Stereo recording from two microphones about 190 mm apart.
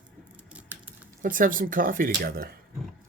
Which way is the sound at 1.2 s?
45° right (ahead or behind).